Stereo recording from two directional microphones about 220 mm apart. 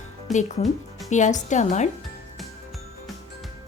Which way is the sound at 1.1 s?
35° left (ahead or behind).